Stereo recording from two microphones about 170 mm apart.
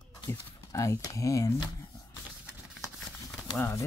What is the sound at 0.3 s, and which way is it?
Speech, 20° left (ahead or behind).